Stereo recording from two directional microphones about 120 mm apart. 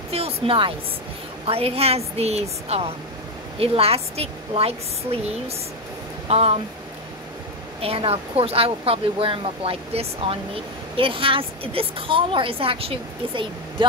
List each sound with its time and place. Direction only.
0.1 s a sound: 50° right (ahead or behind)
1.4 s a woman's voice: 55° right (ahead or behind)
7.8 s speech: 55° right (ahead or behind)